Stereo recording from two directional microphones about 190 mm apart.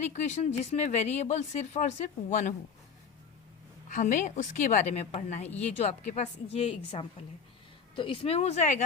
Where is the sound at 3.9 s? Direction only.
40° left (ahead or behind).